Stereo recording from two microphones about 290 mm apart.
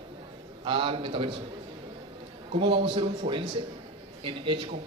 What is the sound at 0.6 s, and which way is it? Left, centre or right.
Speech, centre.